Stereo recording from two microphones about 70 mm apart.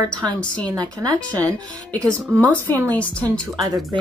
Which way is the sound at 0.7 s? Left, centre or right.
Right.